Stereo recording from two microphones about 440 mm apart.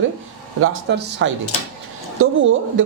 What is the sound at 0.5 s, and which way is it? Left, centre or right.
Speech, right.